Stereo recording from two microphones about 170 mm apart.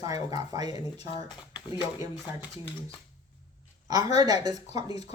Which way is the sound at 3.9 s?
20° right (ahead or behind).